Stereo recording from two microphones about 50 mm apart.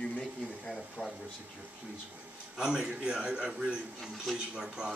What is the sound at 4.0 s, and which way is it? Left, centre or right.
Speech, centre.